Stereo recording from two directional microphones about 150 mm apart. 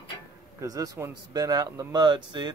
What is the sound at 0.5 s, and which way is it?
Speech, 25° right (ahead or behind).